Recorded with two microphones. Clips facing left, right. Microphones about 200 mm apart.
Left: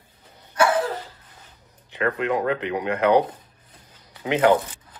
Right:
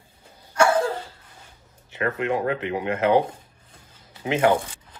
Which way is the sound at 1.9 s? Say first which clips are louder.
Left 1 dB; 25° right (ahead or behind).